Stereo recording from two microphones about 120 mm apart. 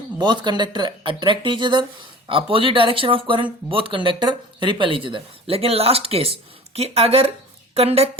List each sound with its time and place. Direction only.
0.2 s a woman's voice: 40° right (ahead or behind); by 8.1 s 55° right (ahead or behind)